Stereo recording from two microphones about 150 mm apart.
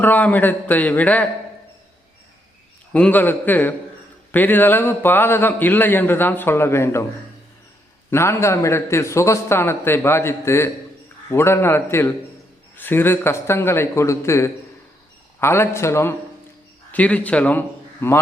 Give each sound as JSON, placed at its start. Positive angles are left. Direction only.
{"t": 0.0, "sound": "a man's voice", "side_deg": 10}
{"t": 2.9, "sound": "a man's voice", "side_deg": 10}
{"t": 8.1, "sound": "a man's voice", "side_deg": 15}